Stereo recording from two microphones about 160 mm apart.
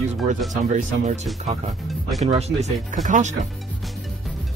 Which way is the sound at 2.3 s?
45° right (ahead or behind).